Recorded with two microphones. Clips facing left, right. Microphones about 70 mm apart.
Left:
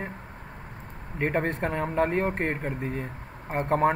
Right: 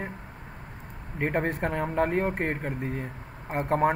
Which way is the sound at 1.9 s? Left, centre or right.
Left.